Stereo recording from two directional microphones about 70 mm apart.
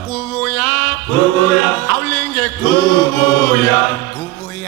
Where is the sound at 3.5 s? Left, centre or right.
Left.